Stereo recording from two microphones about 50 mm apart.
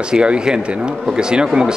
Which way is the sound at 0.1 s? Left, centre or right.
Centre.